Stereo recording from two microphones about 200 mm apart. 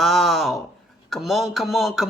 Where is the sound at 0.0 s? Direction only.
Centre (ahead or behind).